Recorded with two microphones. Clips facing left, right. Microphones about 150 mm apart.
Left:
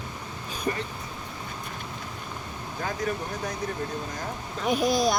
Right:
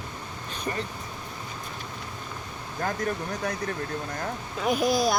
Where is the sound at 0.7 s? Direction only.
30° left (ahead or behind).